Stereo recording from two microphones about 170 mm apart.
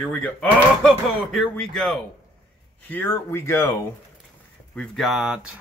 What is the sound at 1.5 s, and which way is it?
Speech, 5° left (ahead or behind).